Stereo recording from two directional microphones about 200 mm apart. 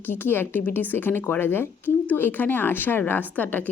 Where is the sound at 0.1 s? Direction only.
10° left (ahead or behind).